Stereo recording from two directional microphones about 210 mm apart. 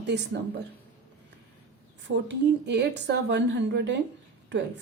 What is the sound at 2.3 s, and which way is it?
A woman's voice, 55° right (ahead or behind).